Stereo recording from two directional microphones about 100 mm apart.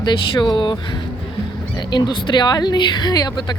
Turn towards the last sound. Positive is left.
turn(degrees=45)  # may be behind; listen again after turning